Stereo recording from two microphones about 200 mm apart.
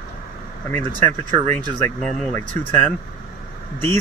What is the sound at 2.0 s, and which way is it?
Speech, 5° left (ahead or behind).